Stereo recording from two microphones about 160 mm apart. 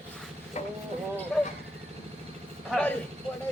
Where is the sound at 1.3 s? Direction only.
5° left (ahead or behind).